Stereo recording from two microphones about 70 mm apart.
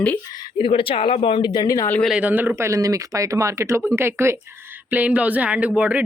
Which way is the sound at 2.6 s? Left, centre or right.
Right.